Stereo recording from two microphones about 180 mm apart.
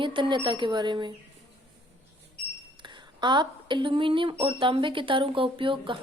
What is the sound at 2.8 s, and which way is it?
A woman's voice, 25° right (ahead or behind).